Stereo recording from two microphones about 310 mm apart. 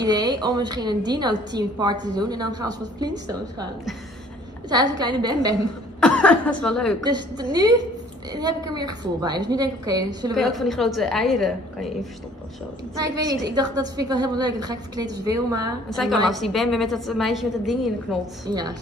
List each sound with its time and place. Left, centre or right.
0.0 s a woman's voice: centre
4.6 s a woman's voice: centre
5.9 s speech: centre
7.1 s a woman's voice: centre
10.3 s a woman's voice: centre
12.9 s a woman's voice: centre
16.3 s a woman's voice: centre
18.4 s a woman's voice: centre